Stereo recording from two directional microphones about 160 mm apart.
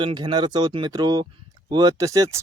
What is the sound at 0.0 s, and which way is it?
Speech, 30° right (ahead or behind).